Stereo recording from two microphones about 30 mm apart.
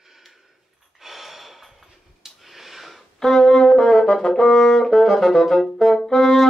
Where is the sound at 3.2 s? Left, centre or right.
Centre.